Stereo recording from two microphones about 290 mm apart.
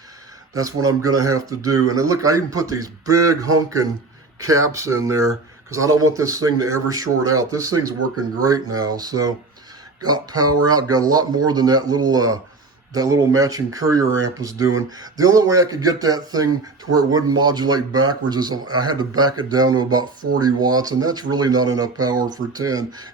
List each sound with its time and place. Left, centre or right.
0.5 s speech: centre
7.9 s speech: right
8.4 s speech: centre